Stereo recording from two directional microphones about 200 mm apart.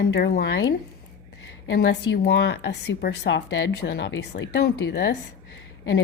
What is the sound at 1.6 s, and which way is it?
A woman's voice, 60° left (ahead or behind).